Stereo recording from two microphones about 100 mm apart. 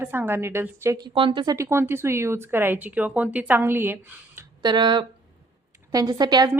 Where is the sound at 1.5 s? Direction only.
30° right (ahead or behind).